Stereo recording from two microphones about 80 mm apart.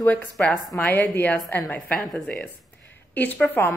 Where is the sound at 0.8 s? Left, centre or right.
Left.